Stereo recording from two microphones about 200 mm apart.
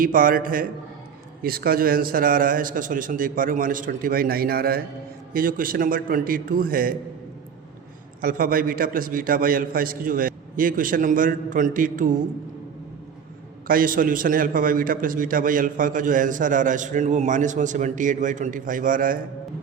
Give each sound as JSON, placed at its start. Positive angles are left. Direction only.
{"t": 0.0, "sound": "a man's voice", "side_deg": -45}
{"t": 8.2, "sound": "a man's voice", "side_deg": -45}
{"t": 13.7, "sound": "a man's voice", "side_deg": -45}